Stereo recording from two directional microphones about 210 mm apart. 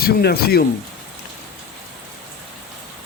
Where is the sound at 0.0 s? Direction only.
50° left (ahead or behind).